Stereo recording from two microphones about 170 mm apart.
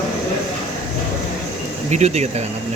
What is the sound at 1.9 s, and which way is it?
Speech, 40° right (ahead or behind).